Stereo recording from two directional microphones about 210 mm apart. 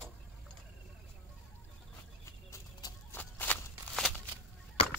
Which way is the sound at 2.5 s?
15° left (ahead or behind).